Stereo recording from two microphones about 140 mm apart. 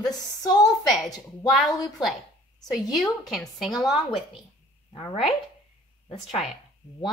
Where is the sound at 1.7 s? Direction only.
30° left (ahead or behind).